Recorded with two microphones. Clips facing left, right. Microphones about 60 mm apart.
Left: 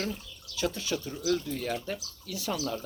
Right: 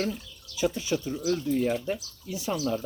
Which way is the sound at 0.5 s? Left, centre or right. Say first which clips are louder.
Right 4 dB; centre.